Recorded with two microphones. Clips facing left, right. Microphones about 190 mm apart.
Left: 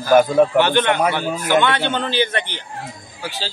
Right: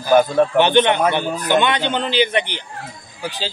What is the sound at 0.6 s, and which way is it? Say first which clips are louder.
A man's voice: right 2 dB; 20° right (ahead or behind).